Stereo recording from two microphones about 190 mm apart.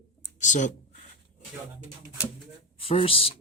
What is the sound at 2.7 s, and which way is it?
Speech, 30° left (ahead or behind).